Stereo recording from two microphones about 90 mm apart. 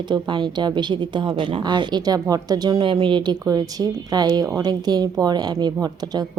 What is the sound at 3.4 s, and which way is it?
A woman's voice, 45° right (ahead or behind).